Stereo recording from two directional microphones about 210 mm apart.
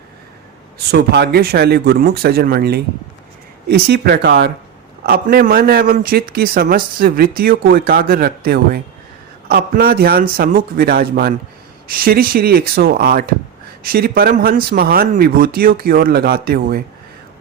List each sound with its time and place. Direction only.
0.9 s a man's voice: 50° right (ahead or behind)